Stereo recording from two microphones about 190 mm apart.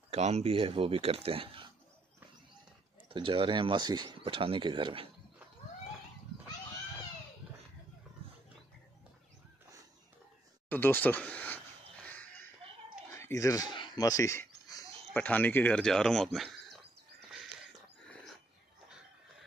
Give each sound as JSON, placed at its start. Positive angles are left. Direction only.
{"t": 0.1, "sound": "speech", "side_deg": -35}
{"t": 3.1, "sound": "speech", "side_deg": -30}
{"t": 10.7, "sound": "speech", "side_deg": 10}
{"t": 13.1, "sound": "a sound", "side_deg": 15}
{"t": 15.1, "sound": "speech", "side_deg": 10}